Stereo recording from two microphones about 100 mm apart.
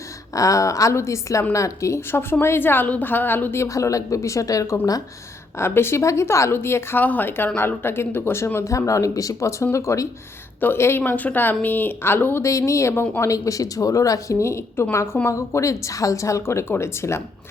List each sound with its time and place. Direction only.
0.3 s a woman's voice: 35° left (ahead or behind)